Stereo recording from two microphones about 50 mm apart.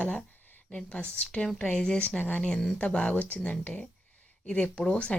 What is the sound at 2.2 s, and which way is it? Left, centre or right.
Speech, left.